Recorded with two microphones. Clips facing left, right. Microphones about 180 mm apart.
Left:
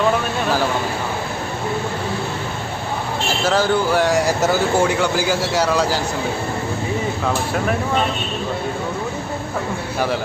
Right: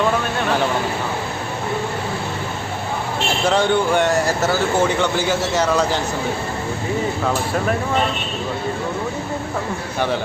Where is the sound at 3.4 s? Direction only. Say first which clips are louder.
Even; 5° left (ahead or behind).